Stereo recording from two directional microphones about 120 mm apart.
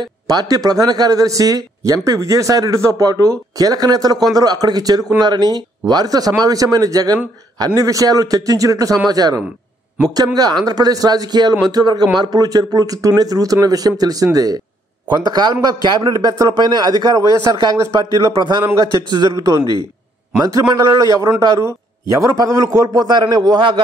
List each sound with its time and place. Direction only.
0.0 s a man's voice: 35° right (ahead or behind)